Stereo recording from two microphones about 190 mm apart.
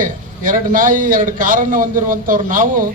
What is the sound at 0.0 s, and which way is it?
A man's voice, 45° right (ahead or behind).